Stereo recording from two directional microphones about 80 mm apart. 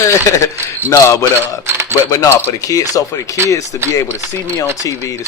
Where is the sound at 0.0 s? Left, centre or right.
Left.